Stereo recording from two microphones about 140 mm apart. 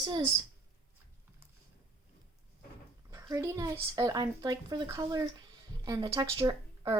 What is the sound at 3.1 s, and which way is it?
Speech, 25° right (ahead or behind).